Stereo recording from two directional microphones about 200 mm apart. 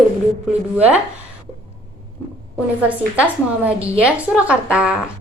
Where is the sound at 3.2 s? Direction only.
5° right (ahead or behind).